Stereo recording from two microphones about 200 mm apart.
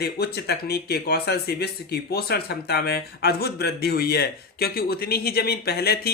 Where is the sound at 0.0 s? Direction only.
55° left (ahead or behind).